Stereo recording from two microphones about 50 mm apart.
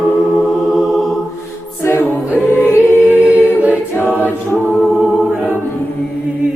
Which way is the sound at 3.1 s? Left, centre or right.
Right.